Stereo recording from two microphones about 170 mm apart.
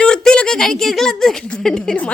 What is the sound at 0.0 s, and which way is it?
Speech, 5° left (ahead or behind).